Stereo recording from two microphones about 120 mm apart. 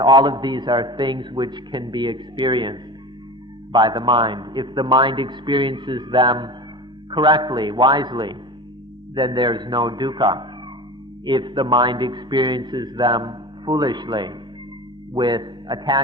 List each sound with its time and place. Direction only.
0.0 s a man's voice: 30° right (ahead or behind)